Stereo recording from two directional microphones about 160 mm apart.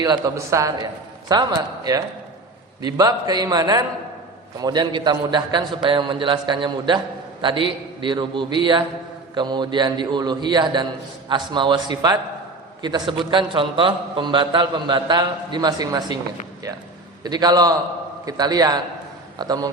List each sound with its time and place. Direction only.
0.0 s a man's voice: 25° right (ahead or behind)
17.2 s a man's voice: 25° right (ahead or behind)